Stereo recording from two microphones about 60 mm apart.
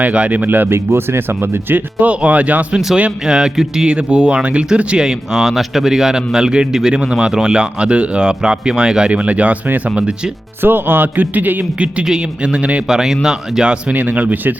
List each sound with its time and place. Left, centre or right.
0.0 s speech: right
2.7 s speech: centre
10.6 s speech: right
12.0 s speech: centre
12.9 s speech: centre
13.9 s speech: right